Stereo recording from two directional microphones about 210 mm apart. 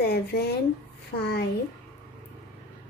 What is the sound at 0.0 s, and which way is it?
Speech, 50° left (ahead or behind).